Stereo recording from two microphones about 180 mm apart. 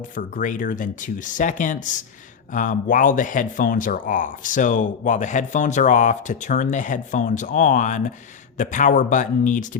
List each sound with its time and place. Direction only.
0.2 s speech: 45° left (ahead or behind)